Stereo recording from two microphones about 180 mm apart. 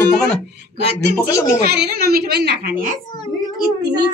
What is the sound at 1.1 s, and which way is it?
Speech, 15° left (ahead or behind).